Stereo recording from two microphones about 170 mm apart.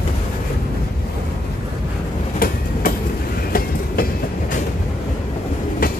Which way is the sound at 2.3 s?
55° left (ahead or behind).